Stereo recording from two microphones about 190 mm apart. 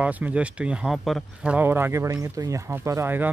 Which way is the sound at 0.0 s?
5° right (ahead or behind).